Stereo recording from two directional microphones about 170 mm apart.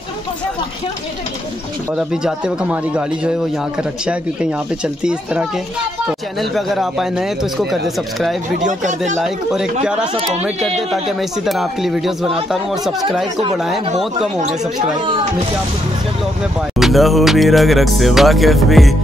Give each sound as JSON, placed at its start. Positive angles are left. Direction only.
{"t": 2.0, "sound": "a man's voice", "side_deg": -5}
{"t": 8.5, "sound": "speech", "side_deg": -45}
{"t": 9.2, "sound": "a man's voice", "side_deg": -5}
{"t": 16.7, "sound": "a man's voice", "side_deg": 0}